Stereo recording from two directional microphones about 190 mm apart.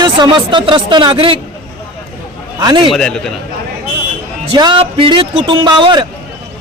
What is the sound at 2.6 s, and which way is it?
Speech, 25° right (ahead or behind).